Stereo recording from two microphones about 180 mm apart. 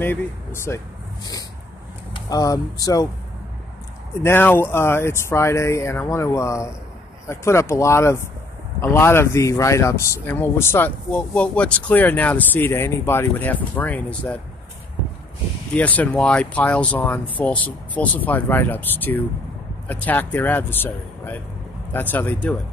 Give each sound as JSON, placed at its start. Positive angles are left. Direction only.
{"t": 0.0, "sound": "speech", "side_deg": 10}
{"t": 2.2, "sound": "speech", "side_deg": 20}
{"t": 4.2, "sound": "speech", "side_deg": 10}
{"t": 15.7, "sound": "speech", "side_deg": 10}